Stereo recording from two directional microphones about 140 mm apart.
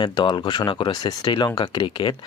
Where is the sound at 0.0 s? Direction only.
35° left (ahead or behind).